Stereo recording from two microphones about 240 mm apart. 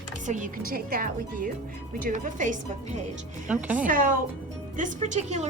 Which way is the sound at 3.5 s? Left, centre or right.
Centre.